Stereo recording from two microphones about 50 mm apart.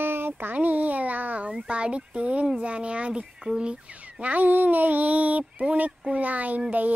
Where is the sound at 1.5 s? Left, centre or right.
Centre.